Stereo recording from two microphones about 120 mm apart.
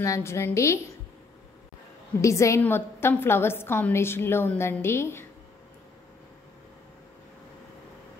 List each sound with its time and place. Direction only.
0.0 s a woman's voice: 25° left (ahead or behind)
2.2 s a woman's voice: 25° left (ahead or behind)